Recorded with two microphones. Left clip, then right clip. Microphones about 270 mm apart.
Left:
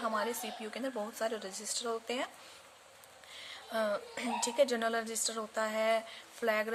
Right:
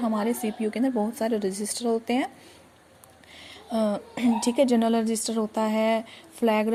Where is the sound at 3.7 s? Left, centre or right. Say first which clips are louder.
Right 7 dB; centre.